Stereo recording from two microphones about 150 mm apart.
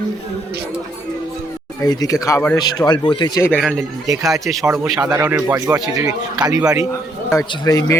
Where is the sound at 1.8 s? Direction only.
25° left (ahead or behind).